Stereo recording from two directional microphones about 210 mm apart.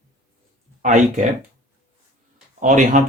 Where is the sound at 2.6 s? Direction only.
40° right (ahead or behind).